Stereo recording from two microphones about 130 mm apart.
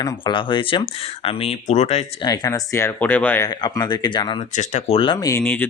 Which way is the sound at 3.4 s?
30° left (ahead or behind).